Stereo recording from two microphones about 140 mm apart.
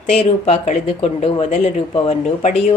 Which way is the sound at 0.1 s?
50° left (ahead or behind).